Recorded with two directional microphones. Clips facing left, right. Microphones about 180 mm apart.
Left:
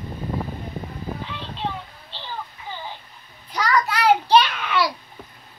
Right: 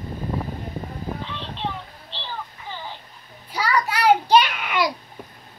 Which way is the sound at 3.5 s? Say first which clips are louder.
Left 1 dB; 10° right (ahead or behind).